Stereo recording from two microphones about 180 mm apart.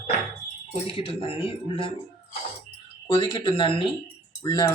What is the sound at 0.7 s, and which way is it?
Speech, 30° left (ahead or behind).